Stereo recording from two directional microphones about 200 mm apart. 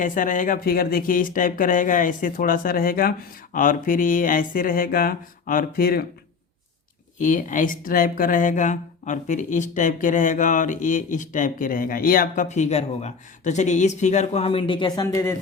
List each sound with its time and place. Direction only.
0.0 s speech: 45° left (ahead or behind)
7.2 s speech: 40° left (ahead or behind); by 15.4 s 15° left (ahead or behind)